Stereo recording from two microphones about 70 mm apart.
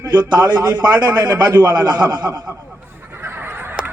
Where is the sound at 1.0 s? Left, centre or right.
Right.